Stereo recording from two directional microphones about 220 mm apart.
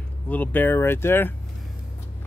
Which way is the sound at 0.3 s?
5° left (ahead or behind).